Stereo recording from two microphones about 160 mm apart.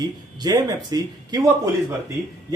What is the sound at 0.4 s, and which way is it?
Speech, 25° right (ahead or behind).